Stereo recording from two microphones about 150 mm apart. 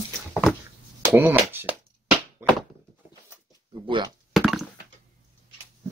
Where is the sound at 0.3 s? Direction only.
Centre (ahead or behind).